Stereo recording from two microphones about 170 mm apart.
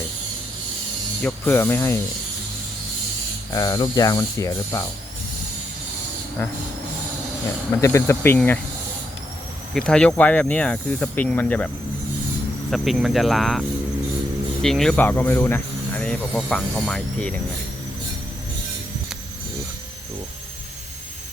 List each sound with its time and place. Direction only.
1.2 s speech: 10° left (ahead or behind)
3.5 s speech: 20° left (ahead or behind)
7.8 s speech: 15° left (ahead or behind)
9.7 s speech: 5° left (ahead or behind)
12.7 s speech: centre (ahead or behind)